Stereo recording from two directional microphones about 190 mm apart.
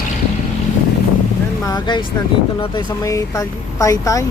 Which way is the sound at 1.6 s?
20° left (ahead or behind).